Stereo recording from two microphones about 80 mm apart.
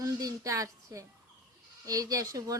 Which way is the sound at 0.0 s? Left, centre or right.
Right.